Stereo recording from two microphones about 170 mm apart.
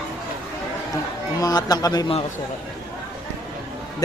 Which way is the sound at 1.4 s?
20° left (ahead or behind).